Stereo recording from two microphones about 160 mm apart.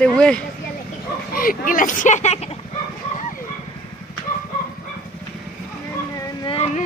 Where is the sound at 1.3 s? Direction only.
60° left (ahead or behind); by 2.5 s 40° left (ahead or behind).